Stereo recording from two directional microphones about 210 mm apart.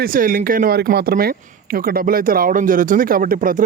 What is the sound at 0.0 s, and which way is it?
Speech, 40° right (ahead or behind).